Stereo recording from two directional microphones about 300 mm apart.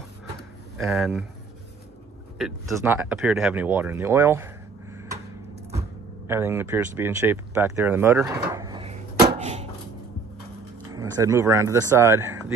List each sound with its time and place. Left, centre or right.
0.7 s speech: centre
2.3 s speech: centre
4.9 s a sound: centre
6.2 s speech: centre
11.0 s speech: centre